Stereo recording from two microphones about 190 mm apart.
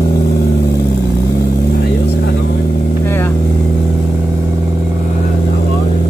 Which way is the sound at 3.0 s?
10° left (ahead or behind).